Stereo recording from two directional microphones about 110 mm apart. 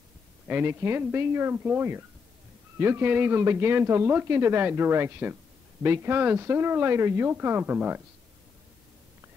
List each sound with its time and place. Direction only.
0.5 s speech: 20° right (ahead or behind)